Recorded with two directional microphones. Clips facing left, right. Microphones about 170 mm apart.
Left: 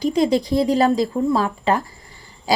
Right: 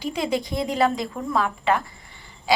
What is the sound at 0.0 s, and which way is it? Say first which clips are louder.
A woman's voice: left 7 dB; 40° left (ahead or behind).